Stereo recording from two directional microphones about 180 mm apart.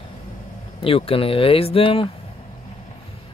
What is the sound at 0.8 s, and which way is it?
Speech, 30° left (ahead or behind).